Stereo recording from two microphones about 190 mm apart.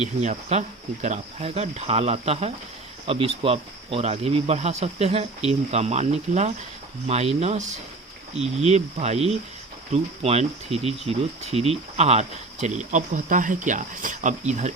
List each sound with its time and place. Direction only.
0.0 s speech: 40° right (ahead or behind)